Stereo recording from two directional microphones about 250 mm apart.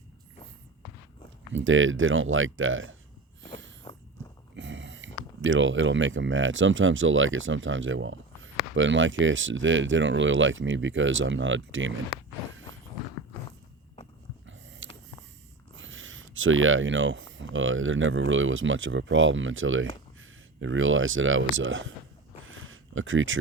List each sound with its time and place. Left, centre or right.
1.5 s speech: right
3.9 s walk: left
4.5 s speech: right
14.8 s a sound: right
15.7 s speech: right
22.4 s a sound: right